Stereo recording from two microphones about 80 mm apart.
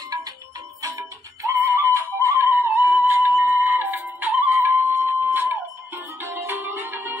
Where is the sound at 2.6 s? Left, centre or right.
Right.